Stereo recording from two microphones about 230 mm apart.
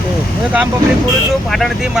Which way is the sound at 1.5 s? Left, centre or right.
Centre.